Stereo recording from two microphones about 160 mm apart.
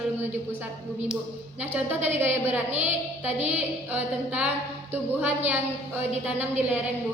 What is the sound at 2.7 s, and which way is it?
Speech, 45° right (ahead or behind).